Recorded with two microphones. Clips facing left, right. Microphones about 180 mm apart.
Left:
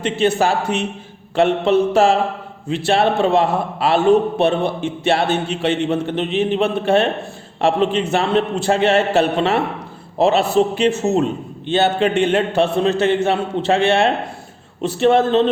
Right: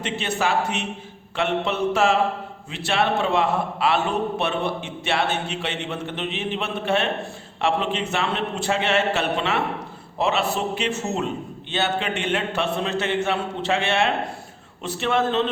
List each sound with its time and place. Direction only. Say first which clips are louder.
0.0 s a man's voice: left 8 dB; 35° left (ahead or behind)